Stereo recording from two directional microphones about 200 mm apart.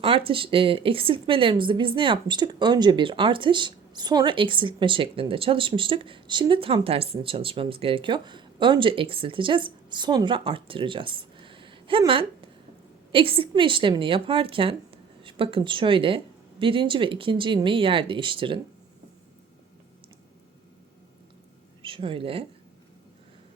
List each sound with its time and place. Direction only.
0.0 s speech: 25° right (ahead or behind)
21.8 s speech: 25° right (ahead or behind)